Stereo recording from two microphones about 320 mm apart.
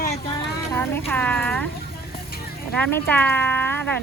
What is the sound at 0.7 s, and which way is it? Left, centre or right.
Speech, centre.